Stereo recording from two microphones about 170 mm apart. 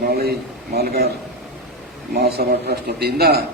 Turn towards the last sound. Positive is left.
turn(degrees=-65)  # may be behind; listen again after turning